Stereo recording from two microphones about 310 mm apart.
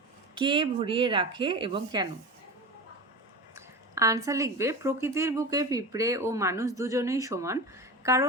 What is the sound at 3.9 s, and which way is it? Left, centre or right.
Speech, centre.